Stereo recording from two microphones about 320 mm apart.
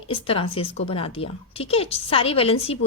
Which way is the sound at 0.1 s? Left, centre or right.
Centre.